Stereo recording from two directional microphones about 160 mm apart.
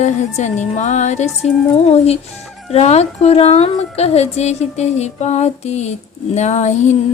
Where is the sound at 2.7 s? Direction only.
40° left (ahead or behind).